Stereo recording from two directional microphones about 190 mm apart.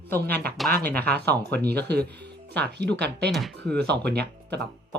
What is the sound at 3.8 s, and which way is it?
Speech, 60° right (ahead or behind).